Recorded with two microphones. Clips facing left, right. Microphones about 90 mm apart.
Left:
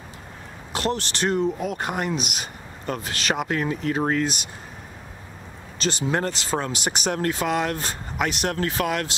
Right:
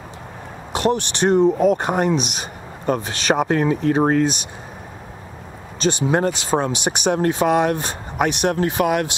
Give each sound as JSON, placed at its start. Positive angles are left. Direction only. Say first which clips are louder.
{"t": 0.7, "sound": "speech", "louder": "right 6 dB", "side_deg": -20}
{"t": 1.6, "sound": "speech", "louder": "right 10 dB", "side_deg": -35}
{"t": 3.3, "sound": "speech", "louder": "right 7 dB", "side_deg": -35}
{"t": 5.8, "sound": "speech", "louder": "right 6 dB", "side_deg": -20}